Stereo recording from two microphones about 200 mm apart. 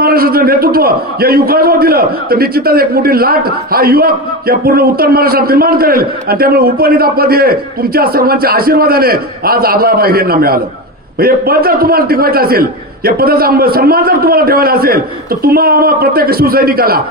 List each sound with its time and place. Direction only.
0.0 s a man's voice: 50° right (ahead or behind)